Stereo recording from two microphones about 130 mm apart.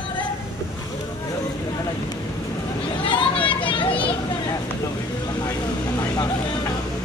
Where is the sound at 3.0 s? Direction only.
40° left (ahead or behind).